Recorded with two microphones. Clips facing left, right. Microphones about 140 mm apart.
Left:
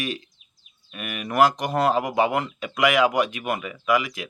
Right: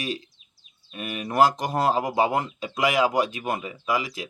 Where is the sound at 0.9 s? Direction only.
30° right (ahead or behind).